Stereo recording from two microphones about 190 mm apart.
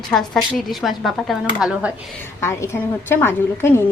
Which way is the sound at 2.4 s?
15° left (ahead or behind).